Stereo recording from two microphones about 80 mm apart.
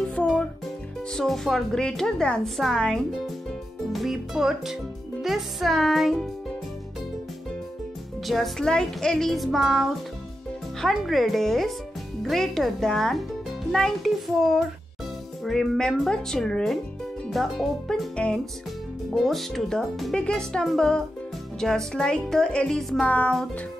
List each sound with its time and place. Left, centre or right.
1.1 s a woman's voice: centre
8.3 s a woman's voice: centre
23.0 s speech: centre